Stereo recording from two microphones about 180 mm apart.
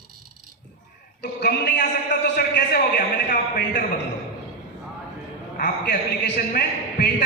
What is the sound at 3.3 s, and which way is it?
Speech, 55° left (ahead or behind).